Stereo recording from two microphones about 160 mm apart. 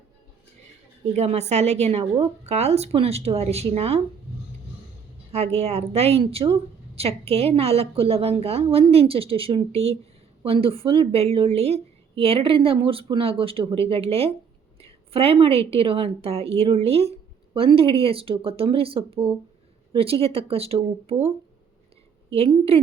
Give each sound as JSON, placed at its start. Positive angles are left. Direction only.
{"t": 1.1, "sound": "a woman's voice", "side_deg": -45}
{"t": 5.3, "sound": "a woman's voice", "side_deg": -40}